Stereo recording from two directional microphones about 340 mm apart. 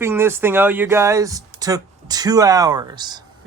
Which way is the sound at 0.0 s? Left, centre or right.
Centre.